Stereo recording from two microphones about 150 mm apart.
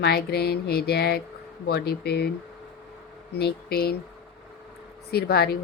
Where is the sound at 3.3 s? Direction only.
90° left.